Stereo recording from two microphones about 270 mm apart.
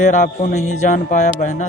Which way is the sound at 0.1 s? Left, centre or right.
Left.